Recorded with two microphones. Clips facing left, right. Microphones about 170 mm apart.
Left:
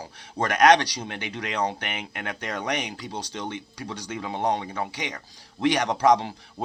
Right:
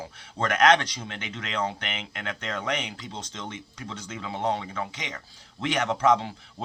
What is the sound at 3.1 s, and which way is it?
Speech, 70° left (ahead or behind).